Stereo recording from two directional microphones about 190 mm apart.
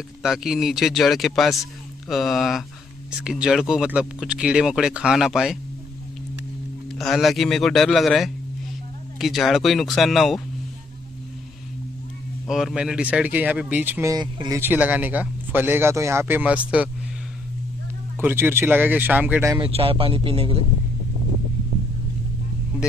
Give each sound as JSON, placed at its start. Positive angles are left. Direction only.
{"t": 0.2, "sound": "speech", "side_deg": 0}
{"t": 7.0, "sound": "speech", "side_deg": 0}
{"t": 12.4, "sound": "speech", "side_deg": 0}
{"t": 14.1, "sound": "speech", "side_deg": -20}
{"t": 14.6, "sound": "speech", "side_deg": -10}
{"t": 18.2, "sound": "speech", "side_deg": -10}
{"t": 19.5, "sound": "speech", "side_deg": -30}